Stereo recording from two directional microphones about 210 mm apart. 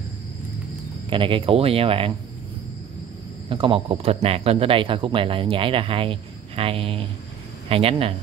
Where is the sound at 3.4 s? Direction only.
25° right (ahead or behind).